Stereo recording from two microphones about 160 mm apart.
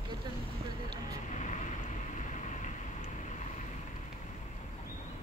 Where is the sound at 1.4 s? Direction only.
50° left (ahead or behind).